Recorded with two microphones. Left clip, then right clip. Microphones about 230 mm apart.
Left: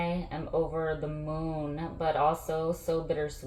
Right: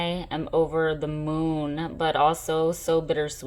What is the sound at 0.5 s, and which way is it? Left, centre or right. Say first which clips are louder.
Speech: right 7 dB; right.